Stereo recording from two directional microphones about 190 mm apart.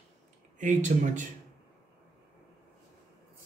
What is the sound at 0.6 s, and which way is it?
Speech, 40° right (ahead or behind).